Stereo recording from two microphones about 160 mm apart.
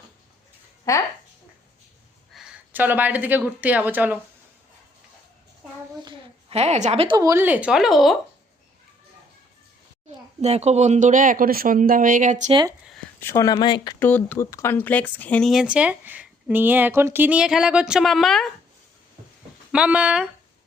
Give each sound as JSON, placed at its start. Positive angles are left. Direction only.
{"t": 0.9, "sound": "speech", "side_deg": 20}
{"t": 2.3, "sound": "speech", "side_deg": -5}
{"t": 6.5, "sound": "a woman's voice", "side_deg": -40}
{"t": 7.2, "sound": "speech", "side_deg": -15}
{"t": 10.1, "sound": "speech", "side_deg": -45}
{"t": 12.8, "sound": "a sound", "side_deg": 0}
{"t": 13.1, "sound": "speech", "side_deg": 20}
{"t": 14.0, "sound": "speech", "side_deg": 10}
{"t": 19.7, "sound": "speech", "side_deg": -5}